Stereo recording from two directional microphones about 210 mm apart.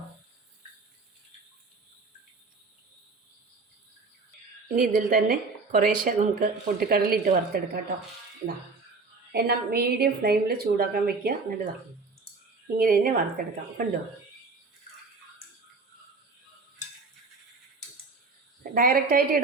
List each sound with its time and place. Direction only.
4.7 s a woman's voice: 40° right (ahead or behind)
9.3 s a woman's voice: 50° right (ahead or behind)
12.7 s a woman's voice: 40° right (ahead or behind)
18.7 s a woman's voice: 45° right (ahead or behind)